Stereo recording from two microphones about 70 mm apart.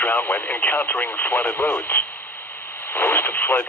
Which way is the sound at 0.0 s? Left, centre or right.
Left.